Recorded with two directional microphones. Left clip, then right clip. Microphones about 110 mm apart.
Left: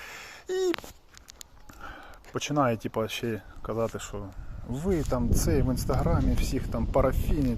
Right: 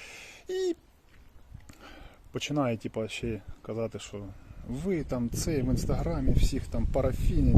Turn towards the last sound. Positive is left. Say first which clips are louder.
# left 4 dB
turn(degrees=0)  # may be behind; listen again after turning